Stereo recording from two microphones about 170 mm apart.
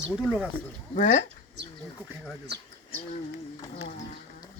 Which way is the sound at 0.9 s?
50° left (ahead or behind).